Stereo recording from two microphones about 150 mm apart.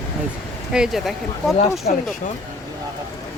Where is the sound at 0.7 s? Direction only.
5° right (ahead or behind).